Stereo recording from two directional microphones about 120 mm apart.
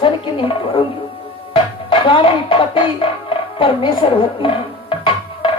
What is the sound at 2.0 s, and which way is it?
Speech, 45° left (ahead or behind).